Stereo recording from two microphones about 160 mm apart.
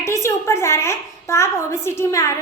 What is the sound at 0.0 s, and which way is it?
A child's voice, 15° left (ahead or behind).